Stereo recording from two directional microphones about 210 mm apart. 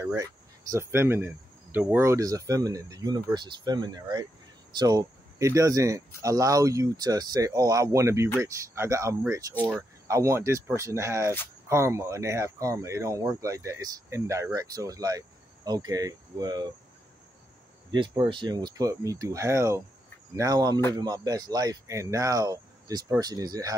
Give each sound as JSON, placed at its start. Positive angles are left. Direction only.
{"t": 0.0, "sound": "speech", "side_deg": -15}
{"t": 17.9, "sound": "speech", "side_deg": -20}